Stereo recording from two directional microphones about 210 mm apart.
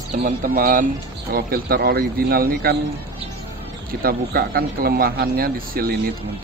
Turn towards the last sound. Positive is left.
turn(degrees=-45)  # may be behind; listen again after turning